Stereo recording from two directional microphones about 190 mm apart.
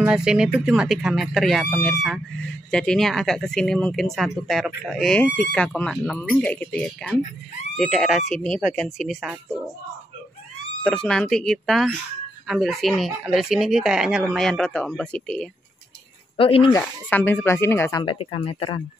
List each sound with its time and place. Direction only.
0.0 s speech: 5° right (ahead or behind)
10.8 s speech: 5° left (ahead or behind)
16.3 s speech: 30° left (ahead or behind)
17.1 s speech: 10° left (ahead or behind)
18.0 s speech: 30° left (ahead or behind)